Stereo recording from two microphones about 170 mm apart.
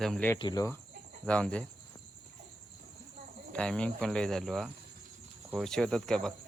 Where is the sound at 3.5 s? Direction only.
5° left (ahead or behind).